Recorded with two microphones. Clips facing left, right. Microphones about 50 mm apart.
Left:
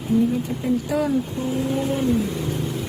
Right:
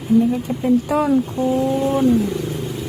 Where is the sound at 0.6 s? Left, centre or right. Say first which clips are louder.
Right 6 dB; right.